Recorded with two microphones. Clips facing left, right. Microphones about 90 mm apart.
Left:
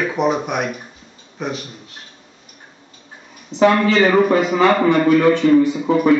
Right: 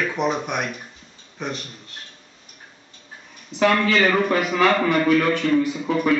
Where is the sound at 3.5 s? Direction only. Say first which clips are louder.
Left 6 dB; 10° right (ahead or behind).